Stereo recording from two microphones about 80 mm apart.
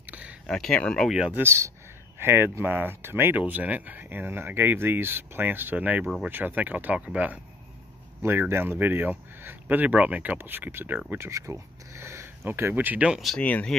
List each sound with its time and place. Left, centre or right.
0.0 s a sound: centre
0.5 s speech: centre
1.0 s speech: centre
1.3 s speech: right; by 7.3 s centre
8.2 s speech: right
13.4 s speech: centre